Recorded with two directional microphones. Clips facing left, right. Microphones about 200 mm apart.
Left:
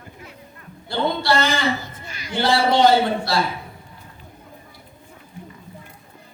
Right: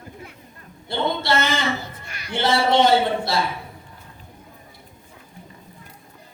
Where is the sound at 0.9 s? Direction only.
20° right (ahead or behind).